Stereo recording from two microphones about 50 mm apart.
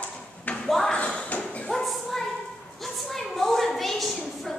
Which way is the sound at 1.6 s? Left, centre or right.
Centre.